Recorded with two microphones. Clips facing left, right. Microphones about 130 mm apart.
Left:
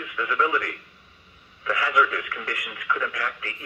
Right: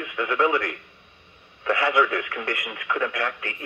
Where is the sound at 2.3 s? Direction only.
25° right (ahead or behind).